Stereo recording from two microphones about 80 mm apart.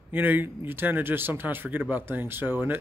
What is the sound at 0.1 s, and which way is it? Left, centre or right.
Speech, right.